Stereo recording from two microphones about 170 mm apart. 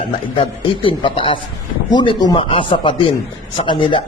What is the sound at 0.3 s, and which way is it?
A man's voice, 30° left (ahead or behind).